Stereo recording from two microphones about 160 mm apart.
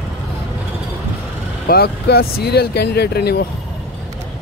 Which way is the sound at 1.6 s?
75° left (ahead or behind).